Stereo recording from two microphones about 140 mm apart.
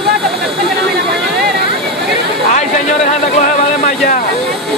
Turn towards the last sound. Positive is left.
turn(degrees=65)  # may be behind; listen again after turning